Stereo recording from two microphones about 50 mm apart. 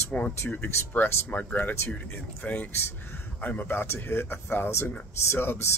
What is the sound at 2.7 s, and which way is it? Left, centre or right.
Speech, left.